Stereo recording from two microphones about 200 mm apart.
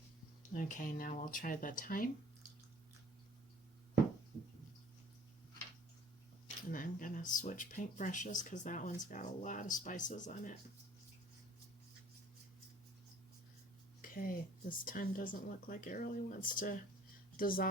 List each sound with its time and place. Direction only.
0.5 s speech: 40° left (ahead or behind)
6.7 s speech: 40° left (ahead or behind)
14.0 s speech: 45° left (ahead or behind)